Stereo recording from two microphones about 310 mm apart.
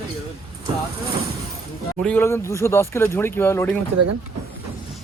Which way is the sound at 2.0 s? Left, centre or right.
Centre.